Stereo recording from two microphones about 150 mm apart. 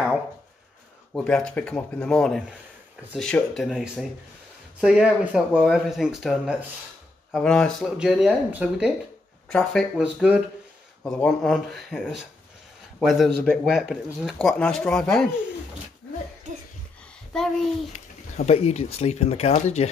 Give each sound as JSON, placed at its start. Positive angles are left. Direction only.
{"t": 1.1, "sound": "speech", "side_deg": 5}
{"t": 9.5, "sound": "speech", "side_deg": 5}
{"t": 11.1, "sound": "speech", "side_deg": 5}
{"t": 13.0, "sound": "speech", "side_deg": 0}
{"t": 17.3, "sound": "speech", "side_deg": 5}
{"t": 17.9, "sound": "speech", "side_deg": 50}